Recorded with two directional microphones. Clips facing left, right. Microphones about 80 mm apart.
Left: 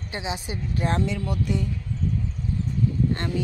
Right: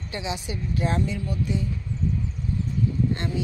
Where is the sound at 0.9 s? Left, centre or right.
Left.